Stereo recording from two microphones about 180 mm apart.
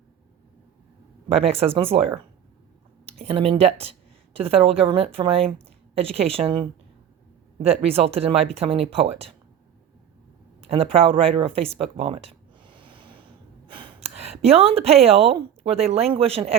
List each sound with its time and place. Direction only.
1.3 s speech: 30° right (ahead or behind)
3.2 s speech: 30° right (ahead or behind)
10.6 s a woman's voice: 30° right (ahead or behind)